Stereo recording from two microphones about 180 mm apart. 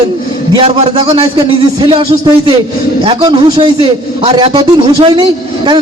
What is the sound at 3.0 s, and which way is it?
A man's voice, 30° right (ahead or behind).